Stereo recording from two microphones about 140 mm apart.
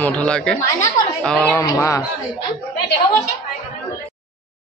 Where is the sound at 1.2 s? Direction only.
5° left (ahead or behind).